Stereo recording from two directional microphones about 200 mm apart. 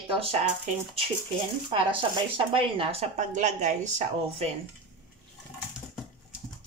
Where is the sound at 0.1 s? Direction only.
30° right (ahead or behind).